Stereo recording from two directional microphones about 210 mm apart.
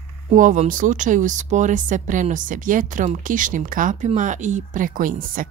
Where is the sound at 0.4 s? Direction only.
40° right (ahead or behind).